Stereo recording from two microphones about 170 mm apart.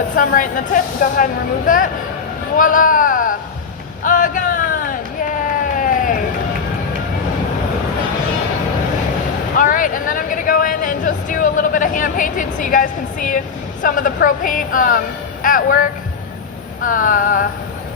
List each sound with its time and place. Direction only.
0.2 s speech: 55° left (ahead or behind)
4.0 s a sound: 50° left (ahead or behind)
9.6 s speech: 50° left (ahead or behind)